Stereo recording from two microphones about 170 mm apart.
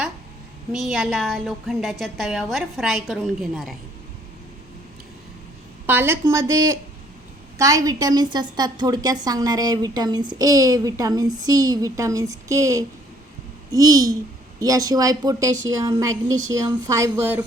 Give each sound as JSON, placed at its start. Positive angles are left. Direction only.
{"t": 0.7, "sound": "a woman's voice", "side_deg": 0}
{"t": 5.8, "sound": "a woman's voice", "side_deg": -10}